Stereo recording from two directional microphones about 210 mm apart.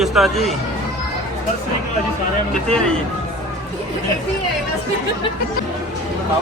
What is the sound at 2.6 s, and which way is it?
Speech, 5° left (ahead or behind).